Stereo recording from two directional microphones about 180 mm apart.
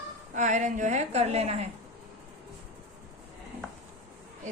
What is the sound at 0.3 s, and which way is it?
A woman's voice, 45° right (ahead or behind).